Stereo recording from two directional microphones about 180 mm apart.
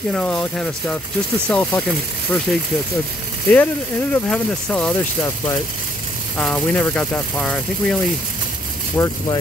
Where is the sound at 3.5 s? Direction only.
10° left (ahead or behind).